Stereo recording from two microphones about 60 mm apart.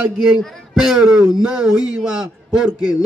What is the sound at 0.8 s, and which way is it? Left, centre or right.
A man's voice, centre.